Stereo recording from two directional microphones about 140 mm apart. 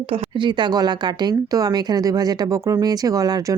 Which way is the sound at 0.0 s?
45° right (ahead or behind).